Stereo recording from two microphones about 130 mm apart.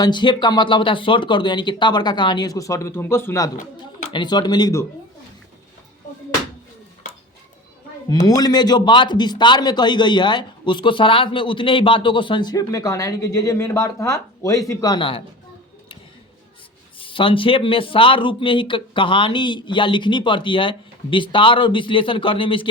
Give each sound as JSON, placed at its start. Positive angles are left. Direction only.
{"t": 0.0, "sound": "a man's voice", "side_deg": 35}
{"t": 4.1, "sound": "a man's voice", "side_deg": 35}
{"t": 8.4, "sound": "a man's voice", "side_deg": 30}
{"t": 17.0, "sound": "a man's voice", "side_deg": 40}